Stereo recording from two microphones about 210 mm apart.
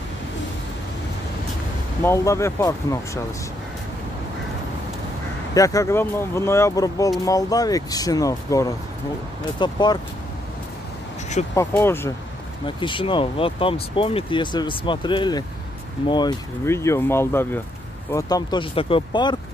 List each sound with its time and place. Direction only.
2.0 s speech: 15° left (ahead or behind)
5.5 s speech: 15° left (ahead or behind)
11.5 s speech: 10° left (ahead or behind)
12.6 s speech: 25° left (ahead or behind)